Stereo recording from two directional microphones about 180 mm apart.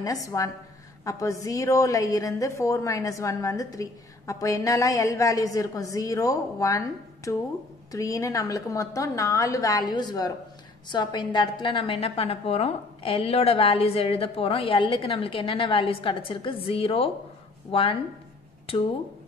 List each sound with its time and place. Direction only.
0.0 s a woman's voice: 20° left (ahead or behind)